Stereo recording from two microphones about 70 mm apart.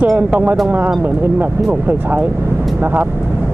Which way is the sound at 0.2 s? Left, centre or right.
Right.